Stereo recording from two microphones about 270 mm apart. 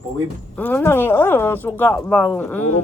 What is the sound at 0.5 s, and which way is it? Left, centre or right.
Speech, centre.